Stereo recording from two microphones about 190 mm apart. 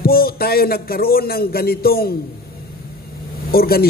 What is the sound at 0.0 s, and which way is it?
A man's voice, 50° left (ahead or behind).